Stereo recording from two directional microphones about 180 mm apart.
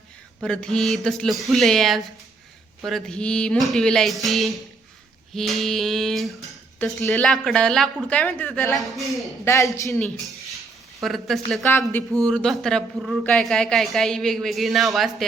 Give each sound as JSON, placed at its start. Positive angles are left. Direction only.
{"t": 0.4, "sound": "a woman's voice", "side_deg": 5}
{"t": 9.4, "sound": "speech", "side_deg": 15}
{"t": 10.0, "sound": "a woman's voice", "side_deg": 0}